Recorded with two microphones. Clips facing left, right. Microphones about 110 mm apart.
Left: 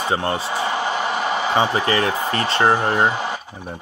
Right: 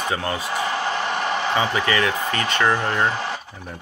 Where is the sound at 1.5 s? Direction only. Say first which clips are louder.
Left 3 dB; 35° left (ahead or behind).